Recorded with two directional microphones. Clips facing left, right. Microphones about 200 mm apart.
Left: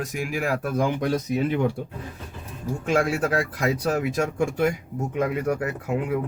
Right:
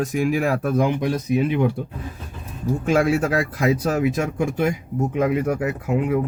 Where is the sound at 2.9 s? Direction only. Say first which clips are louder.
Right 3 dB; 25° right (ahead or behind).